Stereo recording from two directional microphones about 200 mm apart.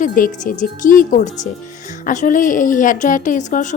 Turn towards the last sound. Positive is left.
turn(degrees=40)  # may be behind; listen again after turning